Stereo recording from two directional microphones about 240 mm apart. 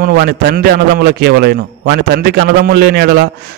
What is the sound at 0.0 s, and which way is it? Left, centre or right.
A man's voice, right.